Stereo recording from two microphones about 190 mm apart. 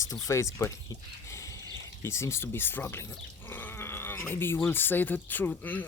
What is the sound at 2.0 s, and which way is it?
Speech, 15° left (ahead or behind).